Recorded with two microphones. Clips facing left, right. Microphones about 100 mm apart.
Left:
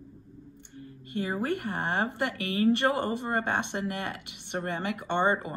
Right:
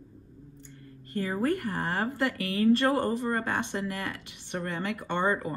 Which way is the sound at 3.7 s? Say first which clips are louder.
Even; 35° left (ahead or behind).